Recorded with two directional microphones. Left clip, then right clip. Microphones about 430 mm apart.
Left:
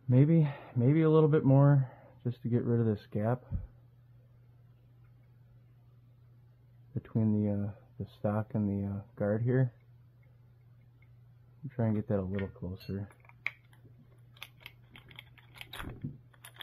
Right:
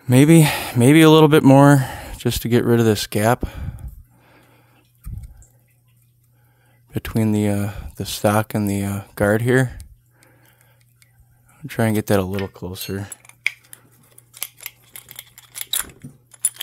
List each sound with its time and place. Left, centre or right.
0.1 s speech: right
6.9 s speech: right
11.6 s speech: right